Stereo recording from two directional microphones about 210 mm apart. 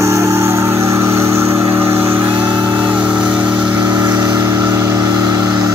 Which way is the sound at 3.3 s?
5° right (ahead or behind).